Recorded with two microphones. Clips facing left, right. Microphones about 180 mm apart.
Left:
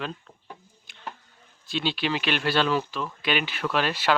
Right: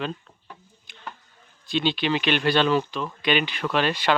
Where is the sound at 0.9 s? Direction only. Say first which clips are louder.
Right 5 dB; centre (ahead or behind).